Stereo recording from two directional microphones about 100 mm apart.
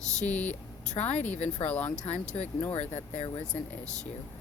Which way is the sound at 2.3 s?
90° left.